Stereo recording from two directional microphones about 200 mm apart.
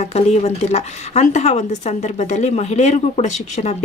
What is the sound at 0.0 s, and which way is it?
Speech, 30° left (ahead or behind).